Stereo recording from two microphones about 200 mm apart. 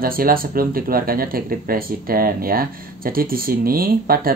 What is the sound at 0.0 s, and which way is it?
Speech, 45° right (ahead or behind).